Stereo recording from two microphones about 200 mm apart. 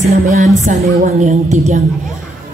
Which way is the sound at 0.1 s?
40° right (ahead or behind).